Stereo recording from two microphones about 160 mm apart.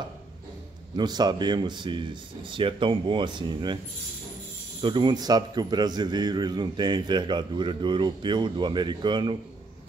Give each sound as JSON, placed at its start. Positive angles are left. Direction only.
{"t": 0.9, "sound": "a man's voice", "side_deg": -25}
{"t": 4.8, "sound": "a man's voice", "side_deg": -30}